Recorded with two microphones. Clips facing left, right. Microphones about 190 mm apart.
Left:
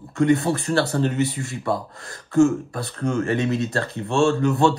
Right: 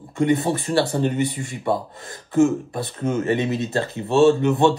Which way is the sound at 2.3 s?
20° right (ahead or behind).